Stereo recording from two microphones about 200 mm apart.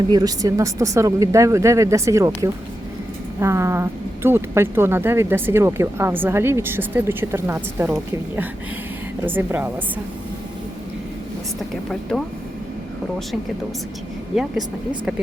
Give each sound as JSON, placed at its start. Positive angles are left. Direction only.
{"t": 0.1, "sound": "speech", "side_deg": -20}
{"t": 12.1, "sound": "speech", "side_deg": 5}